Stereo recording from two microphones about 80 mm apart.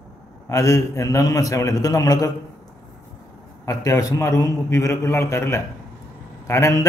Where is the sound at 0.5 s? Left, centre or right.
Left.